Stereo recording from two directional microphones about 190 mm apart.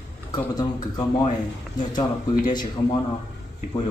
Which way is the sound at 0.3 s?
20° left (ahead or behind).